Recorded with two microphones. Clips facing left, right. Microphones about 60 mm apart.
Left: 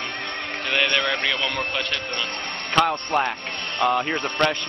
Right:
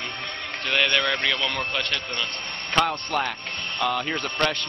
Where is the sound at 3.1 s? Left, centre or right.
Centre.